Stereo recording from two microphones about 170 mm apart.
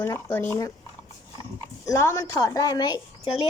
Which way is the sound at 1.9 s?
15° left (ahead or behind).